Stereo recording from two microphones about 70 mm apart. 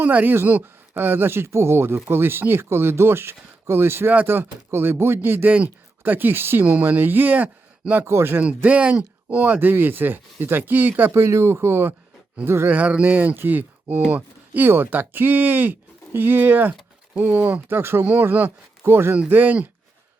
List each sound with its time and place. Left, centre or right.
0.0 s speech: right
8.0 s speech: right
8.4 s speech: right
11.1 s speech: right
19.3 s speech: right